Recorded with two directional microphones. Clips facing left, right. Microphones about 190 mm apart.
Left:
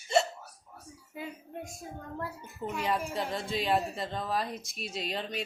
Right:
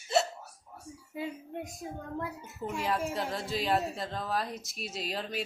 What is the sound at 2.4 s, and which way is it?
Speech, 5° right (ahead or behind).